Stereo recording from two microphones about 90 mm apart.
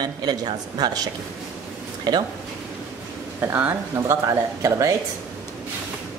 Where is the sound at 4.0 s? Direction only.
40° right (ahead or behind).